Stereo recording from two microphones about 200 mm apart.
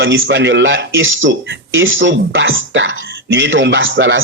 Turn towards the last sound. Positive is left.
turn(degrees=-70)  # may be behind; listen again after turning